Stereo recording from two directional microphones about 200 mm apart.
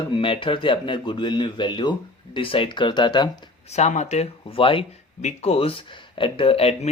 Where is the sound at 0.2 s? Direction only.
25° left (ahead or behind).